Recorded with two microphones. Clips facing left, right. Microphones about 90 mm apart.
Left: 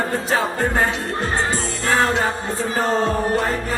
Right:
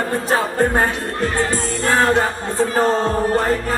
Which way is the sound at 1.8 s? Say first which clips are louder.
Right 3 dB; 55° right (ahead or behind).